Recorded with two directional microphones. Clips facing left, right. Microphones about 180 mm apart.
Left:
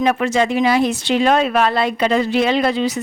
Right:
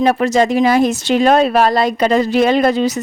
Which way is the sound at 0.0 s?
40° right (ahead or behind).